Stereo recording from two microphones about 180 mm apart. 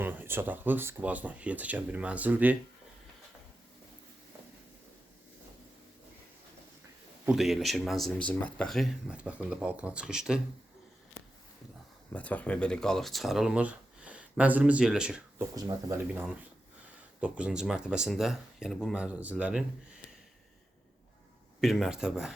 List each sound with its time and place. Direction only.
0.0 s speech: 10° right (ahead or behind)
7.3 s speech: centre (ahead or behind)
12.1 s speech: 10° left (ahead or behind)
15.5 s speech: 20° right (ahead or behind)
17.2 s speech: 5° right (ahead or behind)
21.6 s speech: centre (ahead or behind)